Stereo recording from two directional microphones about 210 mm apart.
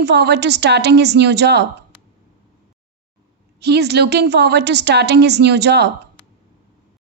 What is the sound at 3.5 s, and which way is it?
A woman's voice, 50° right (ahead or behind).